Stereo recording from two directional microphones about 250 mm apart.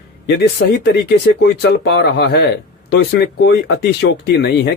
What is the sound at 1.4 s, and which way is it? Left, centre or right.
Speech, left.